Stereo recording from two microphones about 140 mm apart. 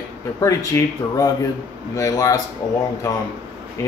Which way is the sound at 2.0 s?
25° left (ahead or behind).